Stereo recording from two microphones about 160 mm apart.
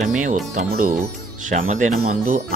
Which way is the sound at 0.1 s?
55° right (ahead or behind).